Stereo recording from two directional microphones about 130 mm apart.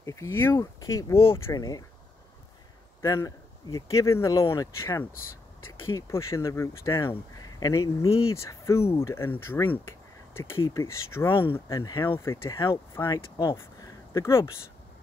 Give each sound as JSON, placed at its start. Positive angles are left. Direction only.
{"t": 0.0, "sound": "speech", "side_deg": 20}
{"t": 3.0, "sound": "speech", "side_deg": 25}